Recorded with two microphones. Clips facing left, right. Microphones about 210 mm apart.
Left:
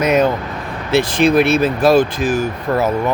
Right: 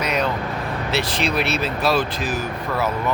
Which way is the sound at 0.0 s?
50° left (ahead or behind).